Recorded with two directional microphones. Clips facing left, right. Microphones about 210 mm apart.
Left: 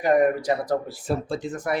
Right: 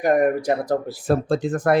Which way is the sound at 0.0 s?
50° right (ahead or behind).